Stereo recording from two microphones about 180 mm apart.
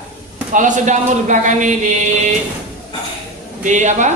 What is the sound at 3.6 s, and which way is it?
Speech, 45° right (ahead or behind).